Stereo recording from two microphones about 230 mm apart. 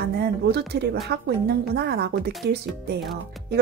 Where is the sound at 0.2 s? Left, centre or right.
Right.